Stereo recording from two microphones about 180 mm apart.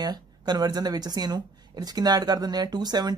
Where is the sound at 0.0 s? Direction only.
25° right (ahead or behind).